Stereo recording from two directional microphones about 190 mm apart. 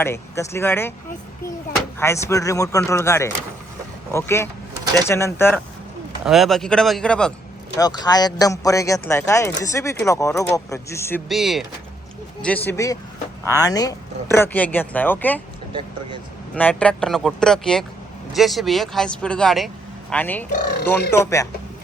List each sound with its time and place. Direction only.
0.0 s speech: 15° left (ahead or behind)
2.0 s speech: 15° left (ahead or behind)
6.2 s speech: centre (ahead or behind)
7.8 s speech: 20° left (ahead or behind)
11.3 s speech: centre (ahead or behind)
15.7 s speech: 25° right (ahead or behind)
16.6 s speech: 5° left (ahead or behind)